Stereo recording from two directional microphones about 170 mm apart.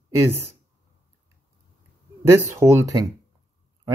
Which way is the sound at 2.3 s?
15° right (ahead or behind).